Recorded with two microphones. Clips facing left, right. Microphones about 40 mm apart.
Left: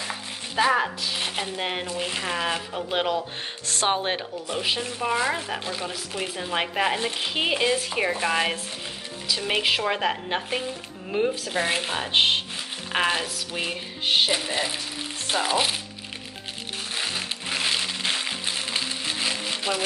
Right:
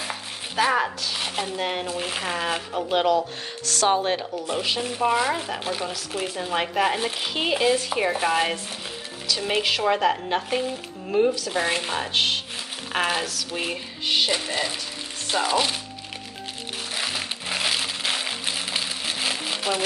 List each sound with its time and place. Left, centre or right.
0.1 s chopping: centre
1.3 s speech: centre
2.0 s speech: centre
3.6 s speech: left
5.0 s speech: centre
12.1 s speech: left
12.9 s speech: centre
14.0 s speech: left
14.3 s speech: centre
16.9 s music: centre